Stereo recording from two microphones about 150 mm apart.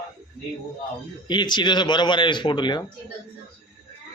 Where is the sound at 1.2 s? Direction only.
30° left (ahead or behind).